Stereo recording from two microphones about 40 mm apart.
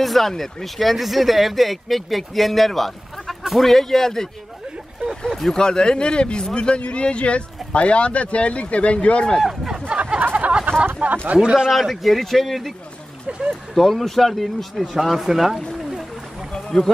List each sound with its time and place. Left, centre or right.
0.0 s speech: centre
5.5 s speech: centre
9.4 s speech: centre
9.8 s a sound: right
11.0 s speech: right
11.3 s speech: centre
11.7 s speech: centre
13.3 s speech: right
13.7 s speech: centre
16.5 s a sound: centre